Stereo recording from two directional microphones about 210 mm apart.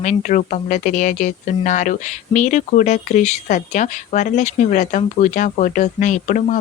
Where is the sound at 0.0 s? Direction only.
35° left (ahead or behind).